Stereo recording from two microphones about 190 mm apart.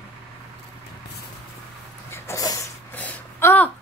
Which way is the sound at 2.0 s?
15° left (ahead or behind).